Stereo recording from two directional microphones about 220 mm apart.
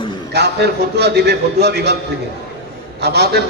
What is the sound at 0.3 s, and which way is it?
A man's voice, 50° right (ahead or behind).